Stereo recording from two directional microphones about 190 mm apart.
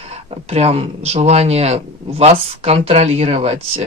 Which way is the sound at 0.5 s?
30° right (ahead or behind).